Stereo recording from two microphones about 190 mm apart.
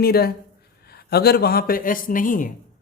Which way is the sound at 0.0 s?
55° left (ahead or behind).